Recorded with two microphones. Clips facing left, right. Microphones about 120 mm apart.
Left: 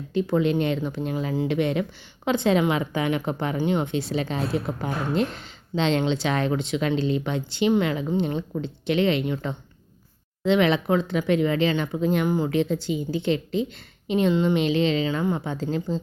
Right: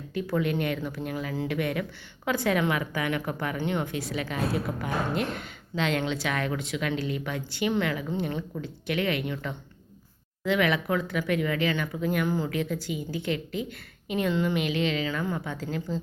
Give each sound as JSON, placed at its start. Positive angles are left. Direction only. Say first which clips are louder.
{"t": 0.1, "sound": "a woman's voice", "louder": "left 6 dB", "side_deg": 25}